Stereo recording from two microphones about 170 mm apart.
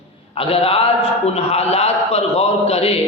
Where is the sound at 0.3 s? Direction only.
35° left (ahead or behind).